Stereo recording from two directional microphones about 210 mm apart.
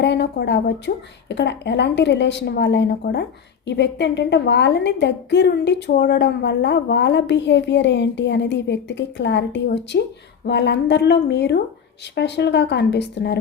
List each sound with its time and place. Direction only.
0.0 s a woman's voice: 55° left (ahead or behind)